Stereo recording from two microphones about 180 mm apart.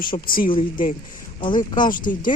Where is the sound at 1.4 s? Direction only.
25° left (ahead or behind).